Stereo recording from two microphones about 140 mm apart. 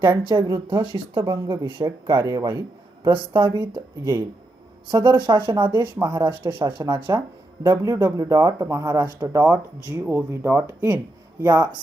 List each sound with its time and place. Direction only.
0.4 s speech: 25° right (ahead or behind)
0.8 s a man's voice: 35° right (ahead or behind)
3.1 s speech: 35° right (ahead or behind)
3.8 s speech: 20° right (ahead or behind)
4.9 s speech: 35° right (ahead or behind); by 11.7 s 15° right (ahead or behind)